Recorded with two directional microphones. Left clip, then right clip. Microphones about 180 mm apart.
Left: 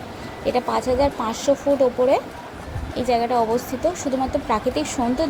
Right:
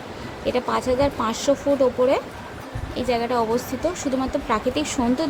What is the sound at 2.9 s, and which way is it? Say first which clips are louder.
Speech: left 3 dB; centre (ahead or behind).